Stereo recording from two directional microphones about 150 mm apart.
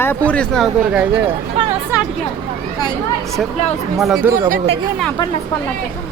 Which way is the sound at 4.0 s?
Centre (ahead or behind).